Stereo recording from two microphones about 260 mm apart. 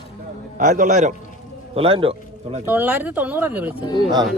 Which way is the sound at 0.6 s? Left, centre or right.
Right.